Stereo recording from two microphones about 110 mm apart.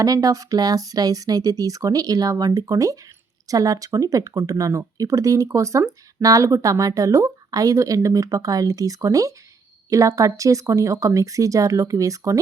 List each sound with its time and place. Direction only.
0.0 s speech: 30° right (ahead or behind)